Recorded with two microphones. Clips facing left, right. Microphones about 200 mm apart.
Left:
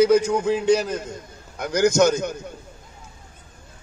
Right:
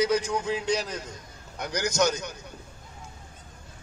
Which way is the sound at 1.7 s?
50° left (ahead or behind).